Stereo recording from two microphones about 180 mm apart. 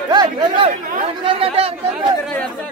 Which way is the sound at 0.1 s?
25° right (ahead or behind).